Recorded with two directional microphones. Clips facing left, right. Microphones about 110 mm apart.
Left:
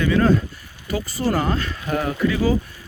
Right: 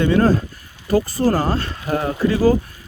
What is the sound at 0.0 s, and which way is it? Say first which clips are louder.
Speech: right 2 dB; 35° right (ahead or behind).